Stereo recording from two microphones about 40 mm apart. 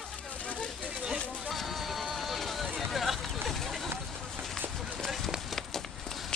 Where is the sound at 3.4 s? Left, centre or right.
Centre.